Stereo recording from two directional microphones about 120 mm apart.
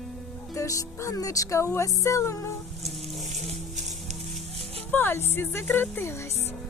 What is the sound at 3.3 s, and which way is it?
Music, 75° right (ahead or behind).